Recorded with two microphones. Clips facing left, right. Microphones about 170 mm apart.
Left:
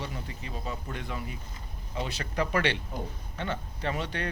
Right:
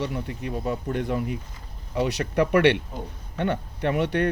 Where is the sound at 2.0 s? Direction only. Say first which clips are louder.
Right 8 dB; 70° right (ahead or behind).